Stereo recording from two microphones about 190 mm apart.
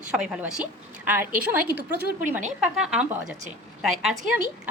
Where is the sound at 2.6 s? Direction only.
5° right (ahead or behind).